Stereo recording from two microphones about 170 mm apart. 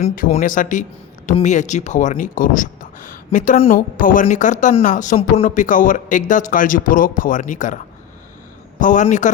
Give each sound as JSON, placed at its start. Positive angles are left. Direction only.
{"t": 0.0, "sound": "speech", "side_deg": 40}
{"t": 0.3, "sound": "speech", "side_deg": 50}
{"t": 8.8, "sound": "speech", "side_deg": 50}